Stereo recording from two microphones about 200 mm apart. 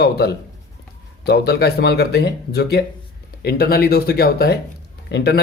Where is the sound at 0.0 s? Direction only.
55° left (ahead or behind).